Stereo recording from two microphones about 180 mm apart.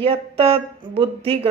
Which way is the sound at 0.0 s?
30° right (ahead or behind).